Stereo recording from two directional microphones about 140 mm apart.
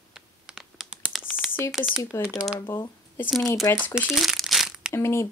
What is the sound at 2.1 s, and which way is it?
Speech, 15° left (ahead or behind).